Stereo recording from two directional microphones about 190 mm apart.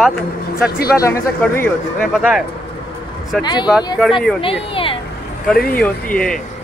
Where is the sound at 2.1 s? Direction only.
5° right (ahead or behind).